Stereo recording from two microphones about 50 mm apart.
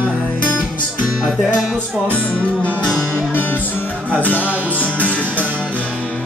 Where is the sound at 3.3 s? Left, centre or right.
Left.